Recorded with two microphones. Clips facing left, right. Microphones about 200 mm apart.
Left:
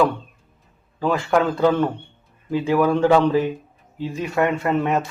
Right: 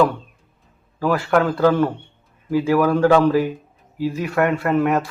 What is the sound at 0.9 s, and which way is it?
Speech, 20° left (ahead or behind).